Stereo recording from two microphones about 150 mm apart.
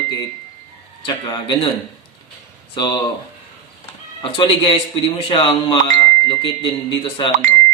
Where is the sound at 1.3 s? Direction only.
30° left (ahead or behind).